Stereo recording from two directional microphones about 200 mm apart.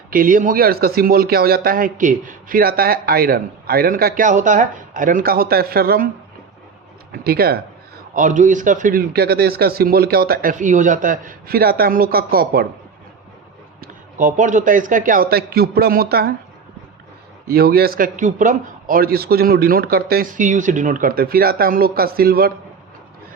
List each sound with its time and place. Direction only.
0.1 s speech: 45° right (ahead or behind)
7.1 s speech: 50° right (ahead or behind)
8.1 s speech: 40° right (ahead or behind)
13.8 s speech: 40° right (ahead or behind)
17.5 s speech: 50° right (ahead or behind)